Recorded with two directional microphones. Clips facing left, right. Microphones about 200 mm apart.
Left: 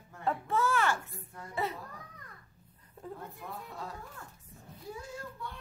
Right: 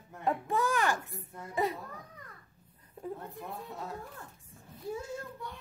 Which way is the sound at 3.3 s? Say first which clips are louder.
Right 2 dB; 20° right (ahead or behind).